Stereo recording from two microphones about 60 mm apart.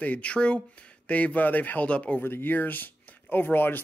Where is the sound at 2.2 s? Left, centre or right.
Left.